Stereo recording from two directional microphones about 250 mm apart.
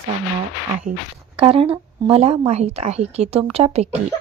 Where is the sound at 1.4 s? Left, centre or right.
Right.